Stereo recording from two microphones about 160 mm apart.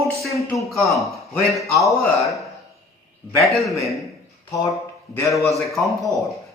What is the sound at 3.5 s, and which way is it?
Speech, centre (ahead or behind).